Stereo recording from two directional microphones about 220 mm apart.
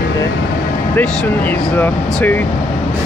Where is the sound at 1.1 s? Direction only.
5° left (ahead or behind).